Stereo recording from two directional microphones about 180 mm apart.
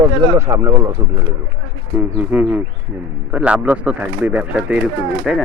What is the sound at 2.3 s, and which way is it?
Speech, 10° right (ahead or behind).